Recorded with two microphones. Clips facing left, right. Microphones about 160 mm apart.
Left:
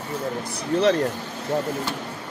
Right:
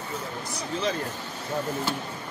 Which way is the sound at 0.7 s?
65° left (ahead or behind).